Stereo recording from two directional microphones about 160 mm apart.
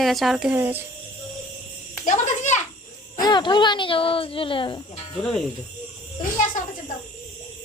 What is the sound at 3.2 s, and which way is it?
Speech, 25° left (ahead or behind).